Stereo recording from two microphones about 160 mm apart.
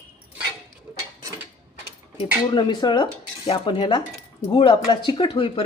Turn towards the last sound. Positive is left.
turn(degrees=35)  # may be behind; listen again after turning